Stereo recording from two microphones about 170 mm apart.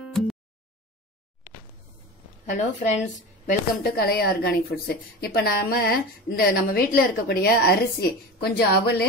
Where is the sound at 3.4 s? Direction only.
60° left (ahead or behind).